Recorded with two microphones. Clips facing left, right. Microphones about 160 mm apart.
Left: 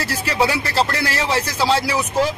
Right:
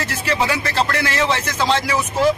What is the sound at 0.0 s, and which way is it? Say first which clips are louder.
Speech: left 1 dB; 35° left (ahead or behind).